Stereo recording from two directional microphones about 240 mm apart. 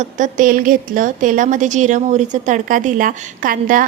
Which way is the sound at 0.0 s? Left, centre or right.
Right.